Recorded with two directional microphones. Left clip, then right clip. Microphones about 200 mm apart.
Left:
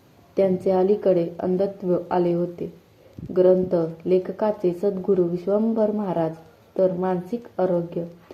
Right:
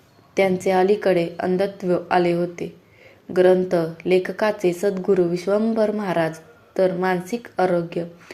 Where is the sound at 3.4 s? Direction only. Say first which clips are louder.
Right 1 dB; 20° right (ahead or behind).